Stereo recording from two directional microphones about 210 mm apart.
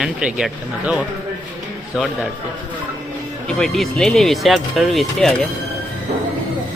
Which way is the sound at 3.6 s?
Centre (ahead or behind).